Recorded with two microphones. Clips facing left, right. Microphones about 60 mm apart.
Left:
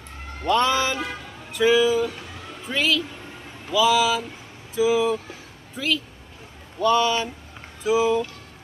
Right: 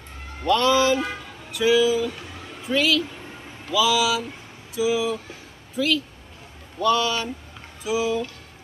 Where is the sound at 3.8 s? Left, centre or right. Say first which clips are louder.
Left 2 dB; left.